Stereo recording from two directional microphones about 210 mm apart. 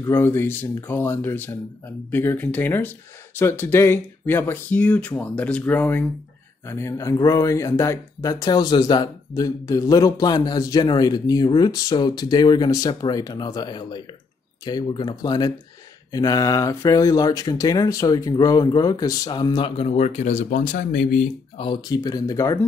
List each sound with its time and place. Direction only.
0.0 s speech: 10° left (ahead or behind); by 21.3 s 40° left (ahead or behind)
21.5 s speech: 20° left (ahead or behind)